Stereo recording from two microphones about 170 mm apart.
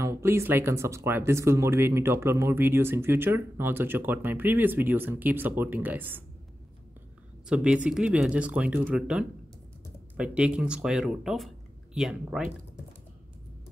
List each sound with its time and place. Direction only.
0.0 s speech: 15° right (ahead or behind)
7.4 s speech: 5° right (ahead or behind)